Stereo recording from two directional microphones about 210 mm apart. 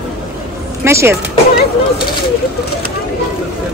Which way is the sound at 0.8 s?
10° right (ahead or behind).